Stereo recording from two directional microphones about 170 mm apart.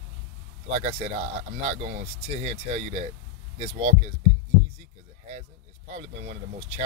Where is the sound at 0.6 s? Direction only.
40° right (ahead or behind).